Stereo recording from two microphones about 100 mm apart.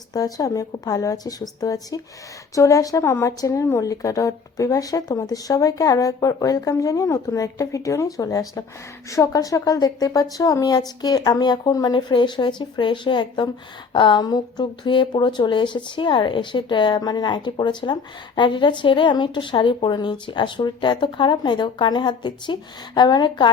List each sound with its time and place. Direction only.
0.1 s a woman's voice: 40° left (ahead or behind)